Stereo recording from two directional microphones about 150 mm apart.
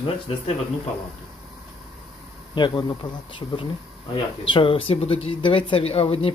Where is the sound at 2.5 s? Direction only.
30° left (ahead or behind).